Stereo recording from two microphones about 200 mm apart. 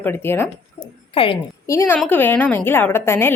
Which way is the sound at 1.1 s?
25° left (ahead or behind).